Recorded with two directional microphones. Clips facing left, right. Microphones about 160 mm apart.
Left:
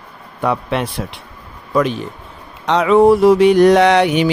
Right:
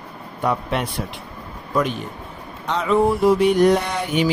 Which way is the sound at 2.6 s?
75° left (ahead or behind).